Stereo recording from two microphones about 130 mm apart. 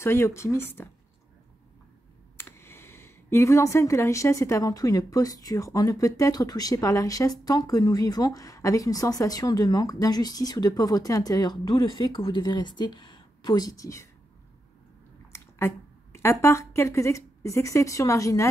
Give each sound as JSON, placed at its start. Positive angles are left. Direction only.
{"t": 0.0, "sound": "speech", "side_deg": 20}
{"t": 2.3, "sound": "speech", "side_deg": 20}
{"t": 15.3, "sound": "speech", "side_deg": 20}